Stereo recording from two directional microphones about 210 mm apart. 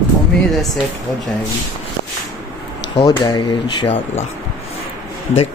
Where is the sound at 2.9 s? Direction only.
20° left (ahead or behind).